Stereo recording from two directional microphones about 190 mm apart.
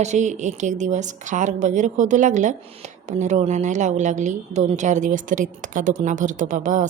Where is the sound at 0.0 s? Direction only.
40° right (ahead or behind).